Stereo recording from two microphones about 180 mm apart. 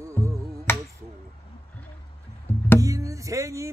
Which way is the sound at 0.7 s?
15° left (ahead or behind).